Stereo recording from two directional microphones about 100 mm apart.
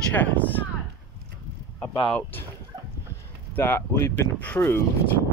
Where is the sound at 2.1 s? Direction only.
15° left (ahead or behind).